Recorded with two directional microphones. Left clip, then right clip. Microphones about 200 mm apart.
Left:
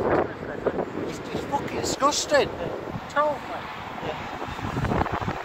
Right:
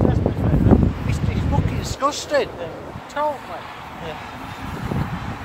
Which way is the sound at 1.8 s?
50° left (ahead or behind).